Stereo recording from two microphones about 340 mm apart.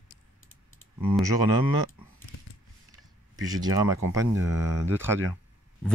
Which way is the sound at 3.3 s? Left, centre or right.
Right.